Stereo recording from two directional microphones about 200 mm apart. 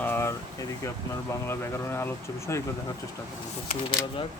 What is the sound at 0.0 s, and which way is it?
Air conditioning, 10° left (ahead or behind).